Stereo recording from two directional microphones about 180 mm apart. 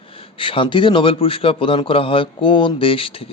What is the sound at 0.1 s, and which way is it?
A man's voice, 30° left (ahead or behind).